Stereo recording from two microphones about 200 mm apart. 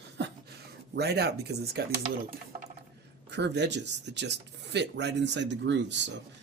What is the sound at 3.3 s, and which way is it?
Speech, 60° right (ahead or behind).